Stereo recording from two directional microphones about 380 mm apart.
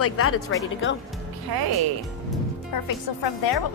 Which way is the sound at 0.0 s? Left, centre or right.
Left.